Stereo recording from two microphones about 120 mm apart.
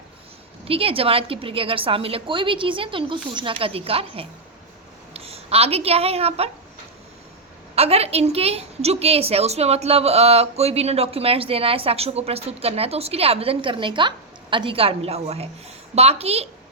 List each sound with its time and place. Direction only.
0.6 s a woman's voice: 50° right (ahead or behind)
7.8 s a woman's voice: 60° right (ahead or behind)